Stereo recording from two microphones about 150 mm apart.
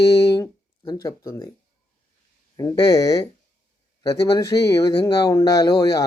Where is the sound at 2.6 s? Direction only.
25° left (ahead or behind).